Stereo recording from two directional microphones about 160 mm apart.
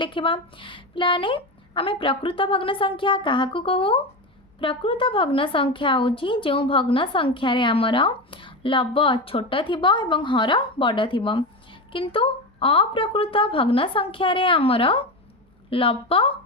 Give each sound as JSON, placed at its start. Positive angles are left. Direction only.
{"t": 0.0, "sound": "a woman's voice", "side_deg": 30}